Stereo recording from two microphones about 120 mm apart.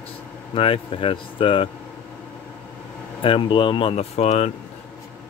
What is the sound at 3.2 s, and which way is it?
Speech, 45° left (ahead or behind).